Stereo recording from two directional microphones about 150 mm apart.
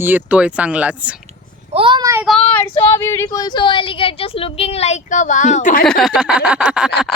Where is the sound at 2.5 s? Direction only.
15° left (ahead or behind); by 5.8 s 55° left (ahead or behind).